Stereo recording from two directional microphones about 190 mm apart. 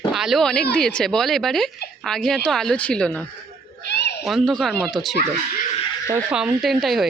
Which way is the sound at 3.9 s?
60° left (ahead or behind).